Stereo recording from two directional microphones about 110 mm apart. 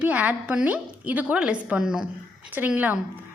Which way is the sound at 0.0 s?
15° right (ahead or behind).